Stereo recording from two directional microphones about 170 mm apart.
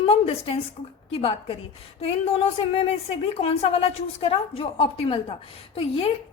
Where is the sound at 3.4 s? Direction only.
35° left (ahead or behind).